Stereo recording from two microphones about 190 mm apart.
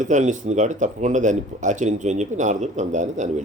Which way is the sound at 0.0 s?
40° right (ahead or behind).